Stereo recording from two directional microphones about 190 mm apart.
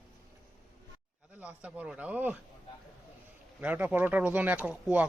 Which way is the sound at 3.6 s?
5° right (ahead or behind).